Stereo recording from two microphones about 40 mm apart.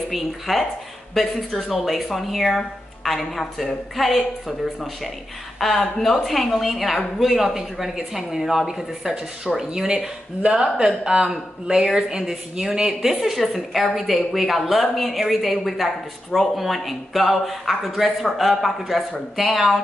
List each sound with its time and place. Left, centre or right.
0.1 s a woman's voice: centre
5.6 s a woman's voice: centre
13.2 s a woman's voice: centre